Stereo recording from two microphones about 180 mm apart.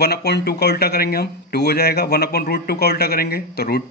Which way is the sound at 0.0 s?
65° left (ahead or behind).